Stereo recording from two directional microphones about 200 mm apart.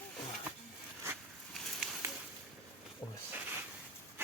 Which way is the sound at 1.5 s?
Centre (ahead or behind).